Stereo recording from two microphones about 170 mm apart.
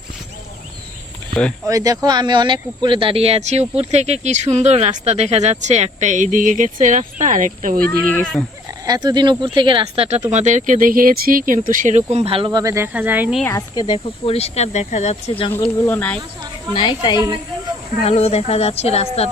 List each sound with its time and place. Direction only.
1.6 s speech: 20° right (ahead or behind); by 7.9 s 50° right (ahead or behind)
8.1 s speech: 10° left (ahead or behind)
8.9 s speech: 25° right (ahead or behind)
12.5 s speech: 20° right (ahead or behind)
13.4 s speech: 20° left (ahead or behind)
15.9 s speech: 10° left (ahead or behind)
16.7 s a woman's voice: 25° left (ahead or behind)
18.0 s speech: 40° left (ahead or behind)